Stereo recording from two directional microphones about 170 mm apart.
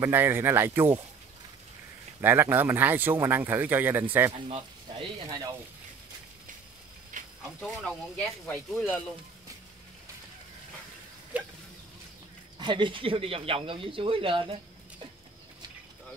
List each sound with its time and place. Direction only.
0.0 s speech: 10° right (ahead or behind)
2.2 s speech: 10° right (ahead or behind)
4.3 s speech: 35° right (ahead or behind)
7.1 s a sound: 50° right (ahead or behind)
7.6 s speech: 5° left (ahead or behind)
11.3 s a sound: 10° right (ahead or behind)
12.5 s speech: 30° right (ahead or behind)